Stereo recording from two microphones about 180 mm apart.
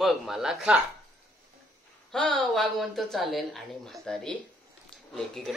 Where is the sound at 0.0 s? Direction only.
Centre (ahead or behind).